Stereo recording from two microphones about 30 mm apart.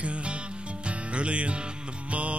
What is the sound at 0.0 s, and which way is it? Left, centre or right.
Music, right.